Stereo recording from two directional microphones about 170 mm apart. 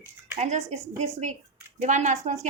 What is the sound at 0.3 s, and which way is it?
A woman's voice, 40° right (ahead or behind).